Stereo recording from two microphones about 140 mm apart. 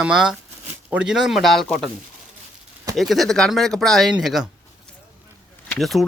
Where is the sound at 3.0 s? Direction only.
Centre (ahead or behind).